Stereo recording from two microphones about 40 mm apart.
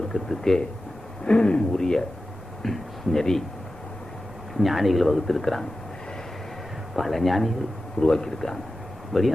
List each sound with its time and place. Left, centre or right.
0.1 s speech: centre
1.2 s speech: left
1.7 s speech: centre
4.5 s speech: centre
6.9 s speech: centre
7.9 s speech: left
9.1 s speech: centre